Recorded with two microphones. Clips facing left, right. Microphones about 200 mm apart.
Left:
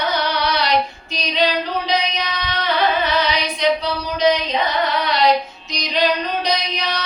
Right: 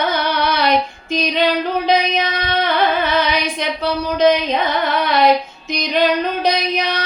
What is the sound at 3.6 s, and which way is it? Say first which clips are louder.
Female singing: left 1 dB; 50° right (ahead or behind).